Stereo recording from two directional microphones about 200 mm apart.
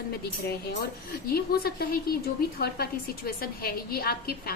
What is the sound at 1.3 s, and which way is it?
A woman's voice, 50° left (ahead or behind).